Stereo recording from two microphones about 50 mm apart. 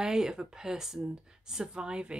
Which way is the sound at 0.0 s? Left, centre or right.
Centre.